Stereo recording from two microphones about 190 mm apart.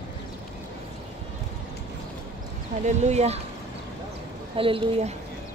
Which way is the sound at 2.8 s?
35° right (ahead or behind).